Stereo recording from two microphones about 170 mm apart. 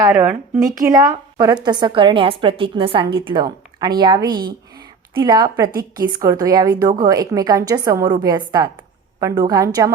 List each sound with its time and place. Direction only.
0.6 s a woman's voice: 20° right (ahead or behind)